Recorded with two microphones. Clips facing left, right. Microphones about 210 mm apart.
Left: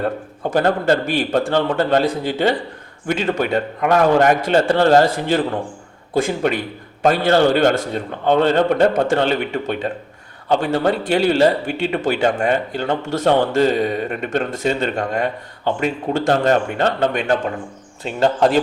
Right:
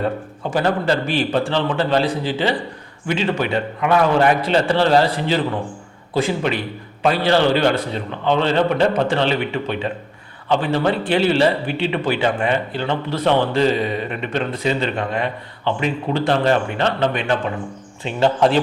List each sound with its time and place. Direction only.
0.5 s speech: 50° left (ahead or behind)